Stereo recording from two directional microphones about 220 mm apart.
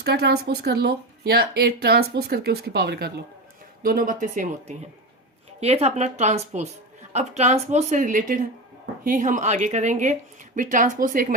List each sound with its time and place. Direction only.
0.0 s a woman's voice: 45° right (ahead or behind)